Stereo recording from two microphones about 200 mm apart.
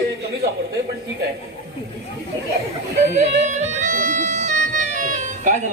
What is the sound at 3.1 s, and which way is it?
Music, 35° right (ahead or behind).